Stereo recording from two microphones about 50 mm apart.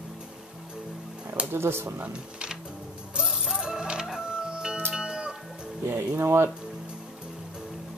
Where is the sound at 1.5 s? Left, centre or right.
Right.